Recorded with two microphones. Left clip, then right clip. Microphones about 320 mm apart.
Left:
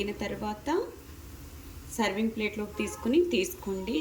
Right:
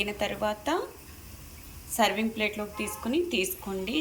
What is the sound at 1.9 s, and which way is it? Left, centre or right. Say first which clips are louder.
A woman's voice: right 4 dB; centre.